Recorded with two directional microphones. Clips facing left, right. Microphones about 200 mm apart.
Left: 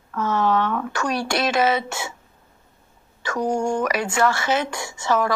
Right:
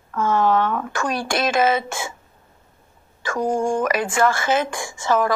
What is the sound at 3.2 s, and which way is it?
Speech, 50° right (ahead or behind).